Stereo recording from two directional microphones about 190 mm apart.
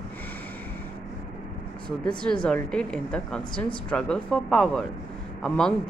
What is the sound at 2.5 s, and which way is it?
Speech, 5° left (ahead or behind).